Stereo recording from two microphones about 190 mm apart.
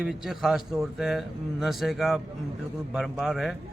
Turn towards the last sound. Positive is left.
turn(degrees=0)  # may be behind; listen again after turning